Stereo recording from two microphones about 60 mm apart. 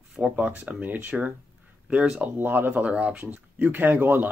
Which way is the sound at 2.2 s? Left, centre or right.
Right.